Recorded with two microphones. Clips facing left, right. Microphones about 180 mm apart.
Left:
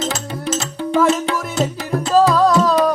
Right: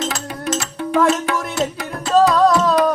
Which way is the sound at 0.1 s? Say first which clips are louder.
Left 1 dB; 25° left (ahead or behind).